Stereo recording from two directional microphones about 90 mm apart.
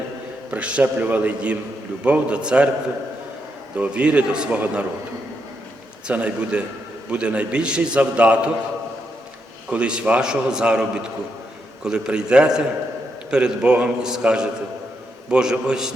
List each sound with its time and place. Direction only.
0.5 s a man's voice: 15° right (ahead or behind)
3.8 s a man's voice: 15° right (ahead or behind)
6.1 s a man's voice: 10° right (ahead or behind)
9.6 s a man's voice: 10° right (ahead or behind)